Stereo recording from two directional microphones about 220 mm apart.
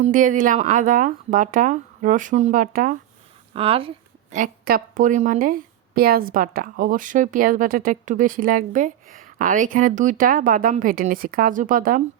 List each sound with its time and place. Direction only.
0.0 s a woman's voice: 35° right (ahead or behind)
3.5 s a woman's voice: 25° right (ahead or behind)